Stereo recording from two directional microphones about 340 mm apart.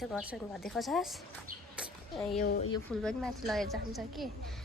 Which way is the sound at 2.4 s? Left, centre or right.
Left.